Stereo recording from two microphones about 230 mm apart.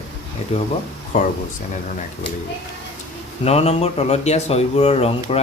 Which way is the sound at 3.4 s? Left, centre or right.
Left.